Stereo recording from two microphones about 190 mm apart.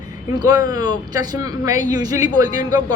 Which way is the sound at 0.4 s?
20° right (ahead or behind).